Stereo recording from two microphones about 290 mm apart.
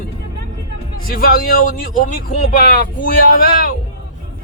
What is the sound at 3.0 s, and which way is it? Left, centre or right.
Speech, left.